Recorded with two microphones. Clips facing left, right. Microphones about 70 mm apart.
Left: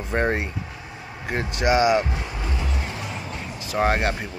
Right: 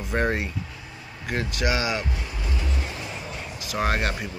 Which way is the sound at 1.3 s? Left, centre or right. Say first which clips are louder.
Left 5 dB; left.